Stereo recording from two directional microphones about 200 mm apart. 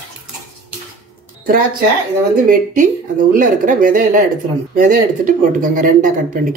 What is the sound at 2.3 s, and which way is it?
Speech, 40° right (ahead or behind).